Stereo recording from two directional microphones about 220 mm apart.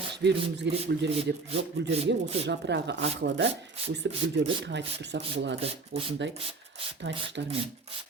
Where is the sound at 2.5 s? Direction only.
50° right (ahead or behind).